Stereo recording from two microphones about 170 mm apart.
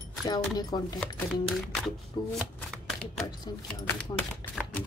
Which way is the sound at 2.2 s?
25° left (ahead or behind).